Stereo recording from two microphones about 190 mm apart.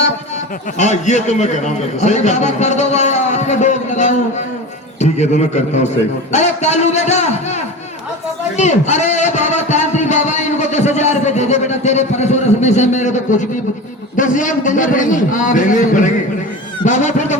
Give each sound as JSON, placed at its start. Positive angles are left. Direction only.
{"t": 0.8, "sound": "a man's voice", "side_deg": 40}
{"t": 8.5, "sound": "a man's voice", "side_deg": 35}